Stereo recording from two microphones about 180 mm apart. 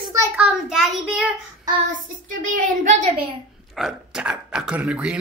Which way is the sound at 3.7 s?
5° right (ahead or behind).